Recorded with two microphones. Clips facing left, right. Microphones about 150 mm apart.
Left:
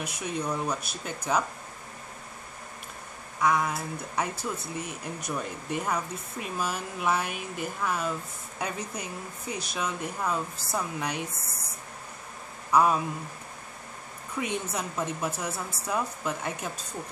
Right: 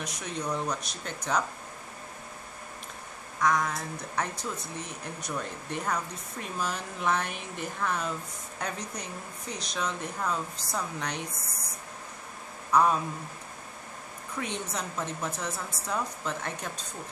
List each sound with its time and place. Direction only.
0.0 s speech: 10° left (ahead or behind)
3.3 s speech: 10° left (ahead or behind)
12.7 s speech: 10° left (ahead or behind)
14.4 s speech: 10° left (ahead or behind)